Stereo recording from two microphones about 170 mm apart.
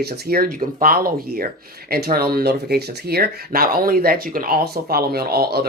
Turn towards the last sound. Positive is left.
turn(degrees=-70)  # may be behind; listen again after turning